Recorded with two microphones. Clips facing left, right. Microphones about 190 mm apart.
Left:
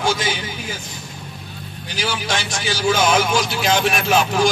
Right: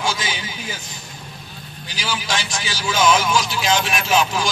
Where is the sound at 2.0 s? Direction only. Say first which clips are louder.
Left 2 dB; 55° left (ahead or behind).